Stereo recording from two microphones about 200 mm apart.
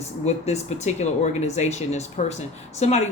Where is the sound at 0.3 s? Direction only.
35° left (ahead or behind).